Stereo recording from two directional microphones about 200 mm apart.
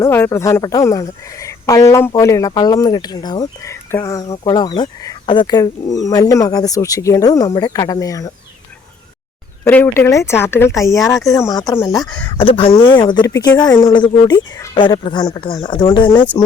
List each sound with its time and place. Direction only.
0.0 s speech: 15° left (ahead or behind)
9.6 s speech: 10° left (ahead or behind)